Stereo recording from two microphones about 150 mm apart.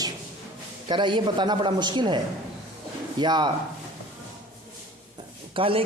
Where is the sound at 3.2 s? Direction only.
30° right (ahead or behind).